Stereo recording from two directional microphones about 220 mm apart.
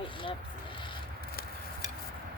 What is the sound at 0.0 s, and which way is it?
Vehicle, 20° left (ahead or behind).